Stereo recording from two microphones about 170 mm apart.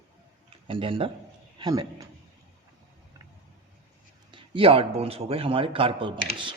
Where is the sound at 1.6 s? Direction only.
25° right (ahead or behind).